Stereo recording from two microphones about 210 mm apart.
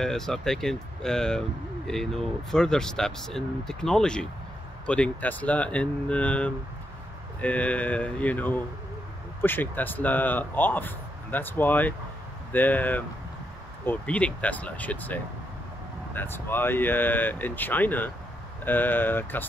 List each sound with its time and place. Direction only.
0.0 s speech: centre (ahead or behind)